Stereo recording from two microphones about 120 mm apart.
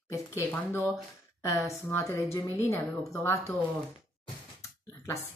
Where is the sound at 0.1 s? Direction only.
25° left (ahead or behind).